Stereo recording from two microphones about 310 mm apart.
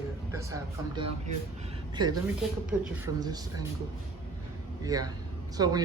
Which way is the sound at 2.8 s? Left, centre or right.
Centre.